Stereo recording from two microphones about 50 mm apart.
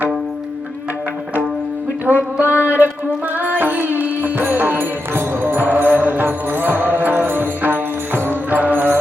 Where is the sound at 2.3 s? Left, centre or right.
Right.